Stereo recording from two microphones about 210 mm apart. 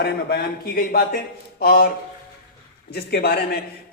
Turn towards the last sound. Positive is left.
turn(degrees=50)  # may be behind; listen again after turning